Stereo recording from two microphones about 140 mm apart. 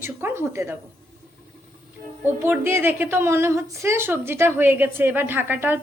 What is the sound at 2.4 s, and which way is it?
A woman's voice, 15° right (ahead or behind).